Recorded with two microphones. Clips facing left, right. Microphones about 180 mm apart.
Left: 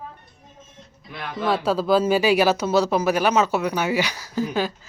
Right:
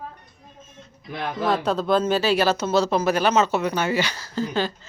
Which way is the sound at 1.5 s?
5° left (ahead or behind).